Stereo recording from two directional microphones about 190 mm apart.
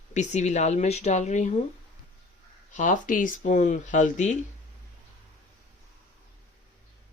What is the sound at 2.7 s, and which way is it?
Speech, 40° left (ahead or behind).